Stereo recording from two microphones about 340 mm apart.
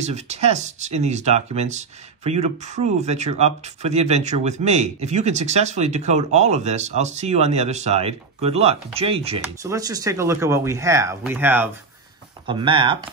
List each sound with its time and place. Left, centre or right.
0.0 s speech: centre